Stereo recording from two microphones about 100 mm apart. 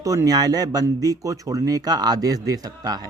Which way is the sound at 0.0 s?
35° right (ahead or behind).